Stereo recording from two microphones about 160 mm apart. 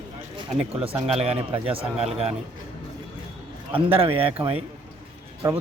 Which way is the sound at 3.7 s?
35° right (ahead or behind).